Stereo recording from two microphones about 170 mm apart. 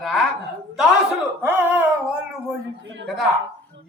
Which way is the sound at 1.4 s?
10° right (ahead or behind).